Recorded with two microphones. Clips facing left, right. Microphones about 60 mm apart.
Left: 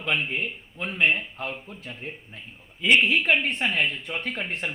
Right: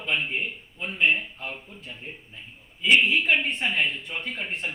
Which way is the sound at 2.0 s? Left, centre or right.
Left.